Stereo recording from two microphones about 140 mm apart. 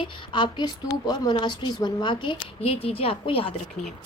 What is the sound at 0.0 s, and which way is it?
A woman's voice, 35° left (ahead or behind).